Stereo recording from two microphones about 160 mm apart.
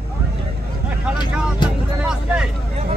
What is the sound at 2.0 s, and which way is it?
Vehicle, 5° right (ahead or behind).